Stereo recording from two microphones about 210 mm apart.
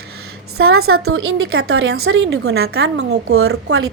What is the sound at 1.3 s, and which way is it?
A woman's voice, 75° right (ahead or behind).